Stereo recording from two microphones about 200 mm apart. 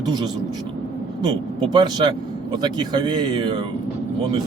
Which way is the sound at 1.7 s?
20° right (ahead or behind).